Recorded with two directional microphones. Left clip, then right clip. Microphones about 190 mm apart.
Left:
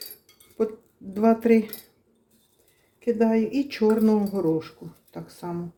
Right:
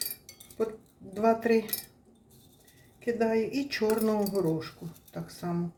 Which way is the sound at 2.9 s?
30° left (ahead or behind).